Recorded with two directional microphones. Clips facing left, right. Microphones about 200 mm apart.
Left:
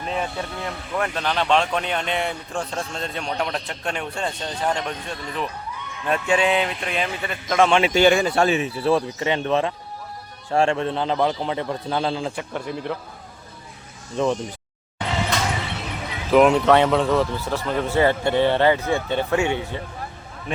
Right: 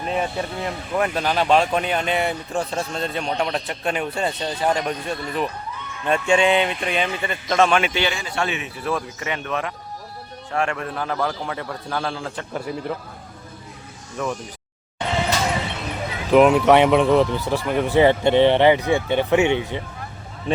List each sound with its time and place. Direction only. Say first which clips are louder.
0.0 s speech: right 3 dB; 5° right (ahead or behind)
6.1 s speech: right 2 dB; 5° left (ahead or behind)
7.6 s a man's voice: left 1 dB; 25° left (ahead or behind)
7.9 s a man's voice: left 8 dB; 50° left (ahead or behind); by 12.5 s 20° left (ahead or behind)
12.5 s speech: right 4 dB; 5° right (ahead or behind)
14.2 s a man's voice: left 5 dB; 25° left (ahead or behind)
16.3 s speech: right 1 dB; 5° right (ahead or behind); by 19.8 s 20° right (ahead or behind)